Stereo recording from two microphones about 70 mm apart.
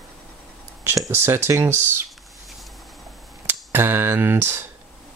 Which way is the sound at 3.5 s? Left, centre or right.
Right.